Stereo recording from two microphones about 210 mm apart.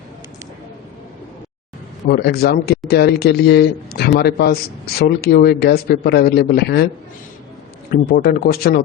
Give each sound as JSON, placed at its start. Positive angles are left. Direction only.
{"t": 2.0, "sound": "speech", "side_deg": 50}
{"t": 7.9, "sound": "speech", "side_deg": 45}